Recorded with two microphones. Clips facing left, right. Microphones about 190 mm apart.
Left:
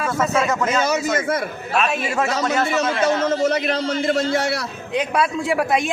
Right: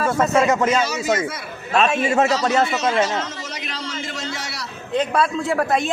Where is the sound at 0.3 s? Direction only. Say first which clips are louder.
Right 4 dB; 30° right (ahead or behind).